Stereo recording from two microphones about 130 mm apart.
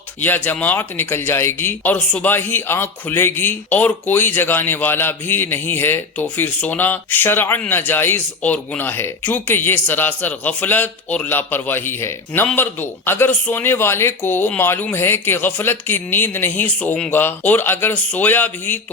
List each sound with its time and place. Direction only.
0.2 s speech: 15° left (ahead or behind)